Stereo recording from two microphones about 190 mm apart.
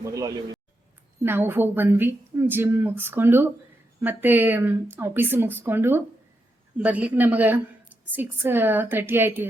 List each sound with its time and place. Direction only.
0.0 s a woman's voice: 15° right (ahead or behind)